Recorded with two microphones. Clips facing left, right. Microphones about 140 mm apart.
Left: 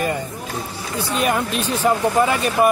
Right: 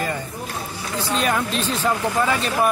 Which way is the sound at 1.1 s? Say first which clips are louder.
Left 2 dB; 10° left (ahead or behind).